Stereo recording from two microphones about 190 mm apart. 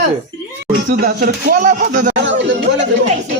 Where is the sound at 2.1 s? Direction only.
75° right (ahead or behind).